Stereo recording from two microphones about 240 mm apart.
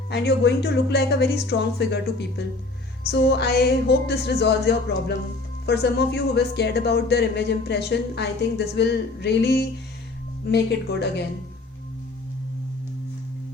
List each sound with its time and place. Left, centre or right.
0.1 s speech: left